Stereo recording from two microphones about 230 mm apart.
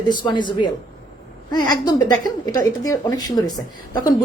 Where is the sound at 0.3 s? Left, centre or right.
Centre.